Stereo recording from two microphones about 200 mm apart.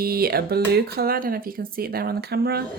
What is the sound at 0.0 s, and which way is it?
Speech, 50° right (ahead or behind).